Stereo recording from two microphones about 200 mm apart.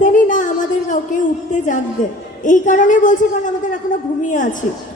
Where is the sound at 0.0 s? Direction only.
40° left (ahead or behind).